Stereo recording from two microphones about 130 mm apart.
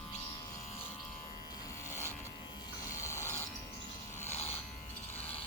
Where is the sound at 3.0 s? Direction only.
20° left (ahead or behind).